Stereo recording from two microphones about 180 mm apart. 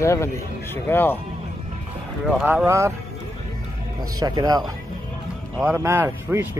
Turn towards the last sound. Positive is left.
turn(degrees=-15)  # may be behind; listen again after turning